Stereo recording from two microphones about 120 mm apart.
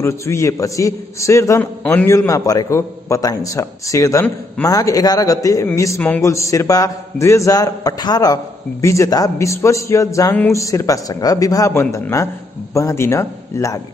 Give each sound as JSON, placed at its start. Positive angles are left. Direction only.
{"t": 0.0, "sound": "a man's voice", "side_deg": 25}